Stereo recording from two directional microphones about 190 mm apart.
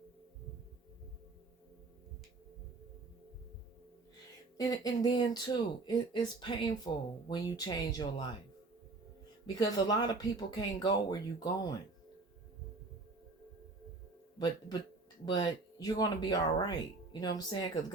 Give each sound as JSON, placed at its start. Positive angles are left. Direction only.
{"t": 4.5, "sound": "speech", "side_deg": 20}
{"t": 9.6, "sound": "speech", "side_deg": 20}
{"t": 14.3, "sound": "speech", "side_deg": 20}